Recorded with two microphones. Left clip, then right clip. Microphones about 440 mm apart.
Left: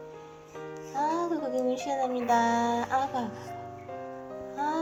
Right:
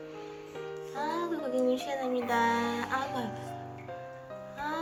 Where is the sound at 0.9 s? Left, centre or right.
Centre.